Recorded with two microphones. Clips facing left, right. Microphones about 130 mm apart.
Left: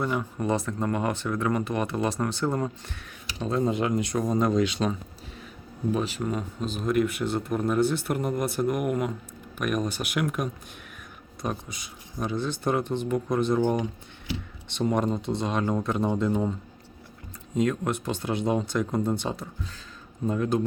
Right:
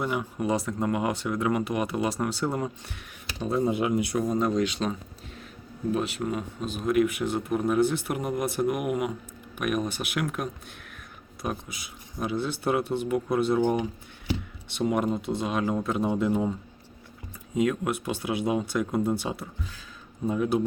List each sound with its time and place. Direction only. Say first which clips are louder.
0.0 s speech: left 1 dB; 10° right (ahead or behind)